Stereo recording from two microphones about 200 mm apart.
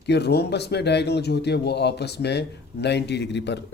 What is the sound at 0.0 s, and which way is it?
Speech, 55° left (ahead or behind).